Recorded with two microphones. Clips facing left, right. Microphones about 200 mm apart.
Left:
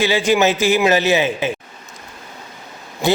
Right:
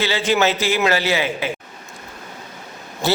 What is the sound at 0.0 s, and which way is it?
A man's voice, 15° left (ahead or behind).